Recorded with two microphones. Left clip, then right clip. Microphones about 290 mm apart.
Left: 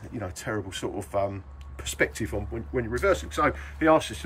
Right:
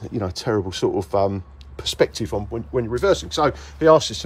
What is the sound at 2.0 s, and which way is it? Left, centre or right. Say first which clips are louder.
Speech: right 6 dB; centre.